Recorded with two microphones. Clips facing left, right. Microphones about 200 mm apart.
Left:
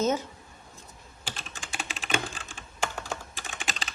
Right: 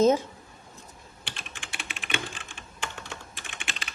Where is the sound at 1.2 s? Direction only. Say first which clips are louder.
Left 3 dB; 40° left (ahead or behind).